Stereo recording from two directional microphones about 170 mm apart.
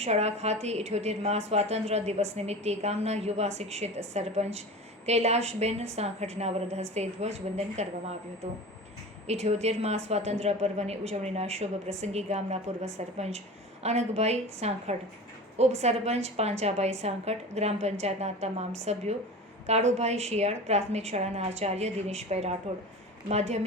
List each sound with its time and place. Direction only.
0.0 s a woman's voice: 40° right (ahead or behind)
9.2 s a woman's voice: 40° right (ahead or behind)